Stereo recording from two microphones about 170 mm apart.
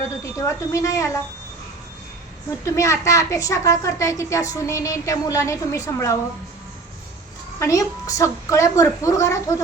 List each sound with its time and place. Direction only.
0.2 s a woman's voice: 20° left (ahead or behind)
2.7 s a child's voice: 15° left (ahead or behind)
7.6 s a woman's voice: 20° left (ahead or behind)